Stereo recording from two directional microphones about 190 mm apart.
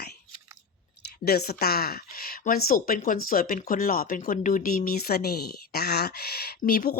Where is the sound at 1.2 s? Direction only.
55° left (ahead or behind).